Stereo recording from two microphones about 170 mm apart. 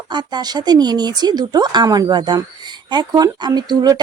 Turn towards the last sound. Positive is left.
turn(degrees=-25)  # may be behind; listen again after turning